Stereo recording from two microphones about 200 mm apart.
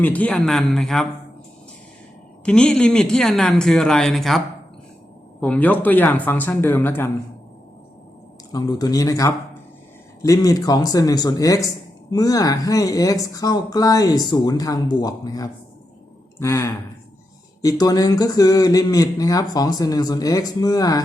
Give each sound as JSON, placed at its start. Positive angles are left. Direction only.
{"t": 0.0, "sound": "speech", "side_deg": 10}
{"t": 2.4, "sound": "speech", "side_deg": 5}
{"t": 8.5, "sound": "speech", "side_deg": 20}